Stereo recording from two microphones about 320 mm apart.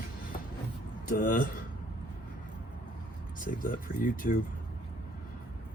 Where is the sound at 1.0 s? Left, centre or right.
Left.